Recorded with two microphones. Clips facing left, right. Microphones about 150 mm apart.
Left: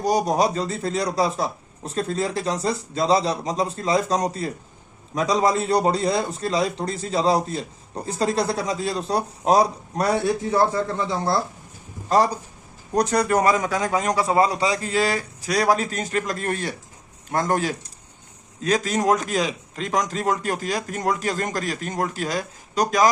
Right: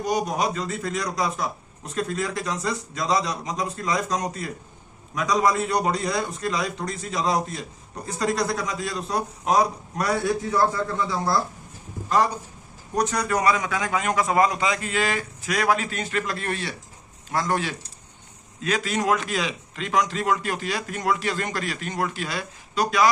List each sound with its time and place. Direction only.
0.0 s a man's voice: 35° left (ahead or behind)
12.0 s a man's voice: 35° left (ahead or behind)
13.2 s a man's voice: 45° left (ahead or behind)